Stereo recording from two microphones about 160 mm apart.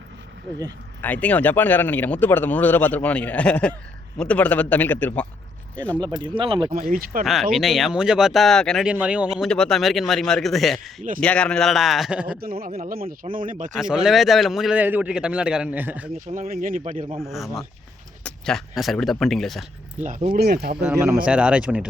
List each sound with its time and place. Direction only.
1.0 s speech: 10° left (ahead or behind)
6.0 s speech: 25° right (ahead or behind)
6.7 s speech: 60° right (ahead or behind)
7.5 s speech: centre (ahead or behind)
12.4 s speech: 70° right (ahead or behind)
13.7 s speech: 5° right (ahead or behind)
16.2 s speech: 55° right (ahead or behind)
17.2 s speech: centre (ahead or behind)
20.0 s speech: 50° right (ahead or behind)
20.4 s speech: 80° right
20.9 s speech: 10° right (ahead or behind)